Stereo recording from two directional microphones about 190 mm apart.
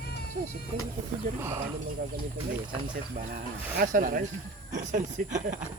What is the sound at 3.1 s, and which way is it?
Speech, 45° right (ahead or behind).